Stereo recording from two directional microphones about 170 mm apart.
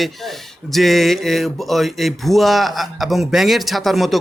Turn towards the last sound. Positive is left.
turn(degrees=0)  # may be behind; listen again after turning